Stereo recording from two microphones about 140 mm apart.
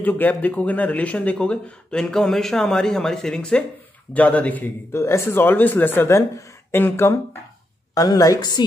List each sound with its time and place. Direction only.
0.0 s a woman's voice: 15° left (ahead or behind); by 8.6 s 30° left (ahead or behind)